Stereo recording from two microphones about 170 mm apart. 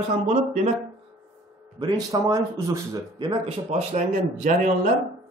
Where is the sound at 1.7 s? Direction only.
25° right (ahead or behind).